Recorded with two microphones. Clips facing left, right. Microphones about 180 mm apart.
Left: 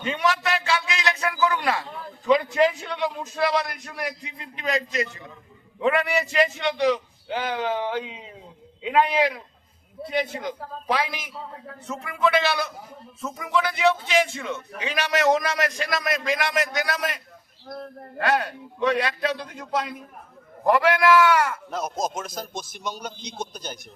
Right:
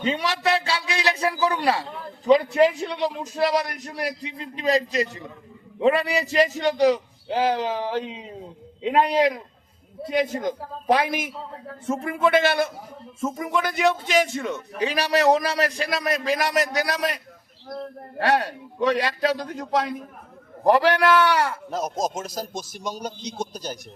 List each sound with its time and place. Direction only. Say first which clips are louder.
0.0 s a man's voice: right 1 dB; 30° right (ahead or behind)
10.1 s a man's voice: right 4 dB; 45° right (ahead or behind)
18.2 s a man's voice: right 2 dB; 35° right (ahead or behind)
20.7 s a man's voice: right 1 dB; 35° right (ahead or behind)